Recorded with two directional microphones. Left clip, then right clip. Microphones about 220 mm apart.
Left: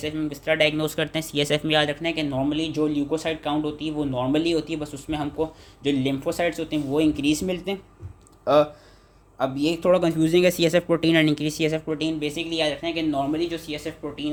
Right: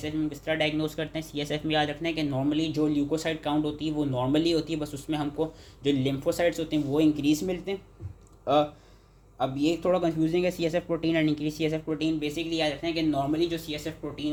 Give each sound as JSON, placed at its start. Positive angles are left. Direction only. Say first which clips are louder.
{"t": 0.0, "sound": "speech", "louder": "left 3 dB", "side_deg": 25}
{"t": 9.4, "sound": "a man's voice", "louder": "left 3 dB", "side_deg": 15}